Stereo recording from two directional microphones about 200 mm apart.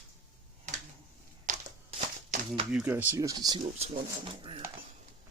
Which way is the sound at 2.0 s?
35° right (ahead or behind).